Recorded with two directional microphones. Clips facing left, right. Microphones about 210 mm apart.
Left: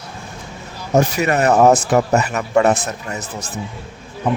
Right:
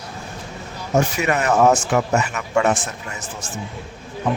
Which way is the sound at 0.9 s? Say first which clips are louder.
Left 3 dB; 40° left (ahead or behind).